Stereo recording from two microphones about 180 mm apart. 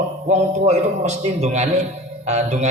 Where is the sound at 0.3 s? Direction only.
40° right (ahead or behind).